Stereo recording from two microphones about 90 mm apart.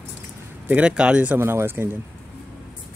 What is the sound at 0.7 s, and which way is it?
Speech, 15° right (ahead or behind).